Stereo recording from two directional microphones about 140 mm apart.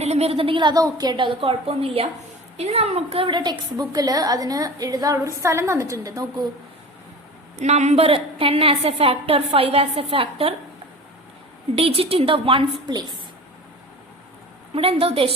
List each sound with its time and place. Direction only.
0.0 s a woman's voice: 50° right (ahead or behind); by 6.5 s 25° right (ahead or behind)
7.6 s a woman's voice: 55° right (ahead or behind)
11.7 s a woman's voice: 40° right (ahead or behind)
14.8 s a woman's voice: 45° right (ahead or behind)